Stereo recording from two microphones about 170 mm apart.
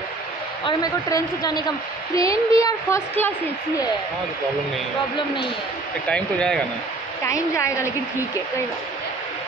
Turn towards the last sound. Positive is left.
turn(degrees=15)  # may be behind; listen again after turning